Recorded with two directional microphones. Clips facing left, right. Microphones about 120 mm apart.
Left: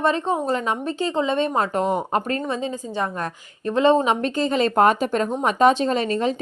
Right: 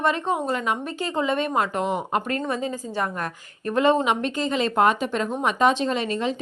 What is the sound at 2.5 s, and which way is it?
A woman's voice, 20° left (ahead or behind).